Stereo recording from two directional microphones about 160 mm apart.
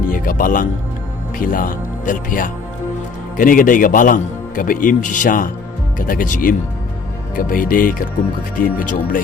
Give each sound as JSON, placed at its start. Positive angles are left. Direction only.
{"t": 0.1, "sound": "a man's voice", "side_deg": 55}